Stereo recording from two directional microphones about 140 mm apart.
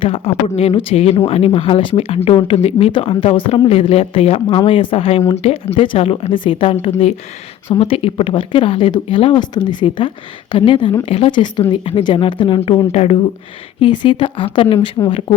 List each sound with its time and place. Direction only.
0.0 s speech: 45° left (ahead or behind)
13.7 s speech: 35° left (ahead or behind)